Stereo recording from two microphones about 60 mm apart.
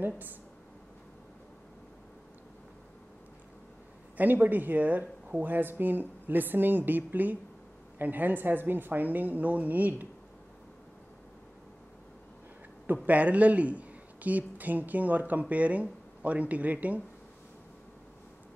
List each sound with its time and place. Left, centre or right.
0.0 s a woman's voice: right
4.2 s a woman's voice: right
12.8 s a woman's voice: right